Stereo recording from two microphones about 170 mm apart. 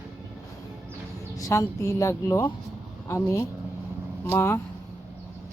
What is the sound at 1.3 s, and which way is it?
Speech, 20° left (ahead or behind).